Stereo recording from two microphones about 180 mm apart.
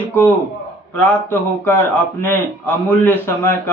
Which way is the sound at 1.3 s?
10° left (ahead or behind).